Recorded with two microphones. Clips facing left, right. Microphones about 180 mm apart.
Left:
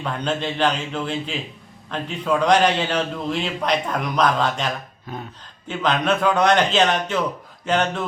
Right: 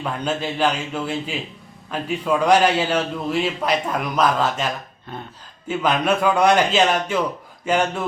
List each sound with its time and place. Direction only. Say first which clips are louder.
0.0 s a man's voice: even; 5° right (ahead or behind)
5.6 s a man's voice: right 1 dB; 5° right (ahead or behind)